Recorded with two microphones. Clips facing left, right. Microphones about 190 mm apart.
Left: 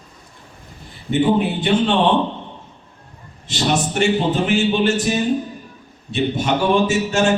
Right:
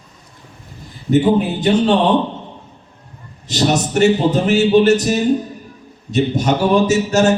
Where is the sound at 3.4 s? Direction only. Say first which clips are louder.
Right 3 dB; 40° right (ahead or behind).